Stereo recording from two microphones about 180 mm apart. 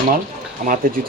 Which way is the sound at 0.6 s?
50° right (ahead or behind).